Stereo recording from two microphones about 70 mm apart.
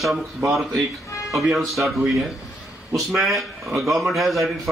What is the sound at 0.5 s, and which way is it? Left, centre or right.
A man's voice, centre.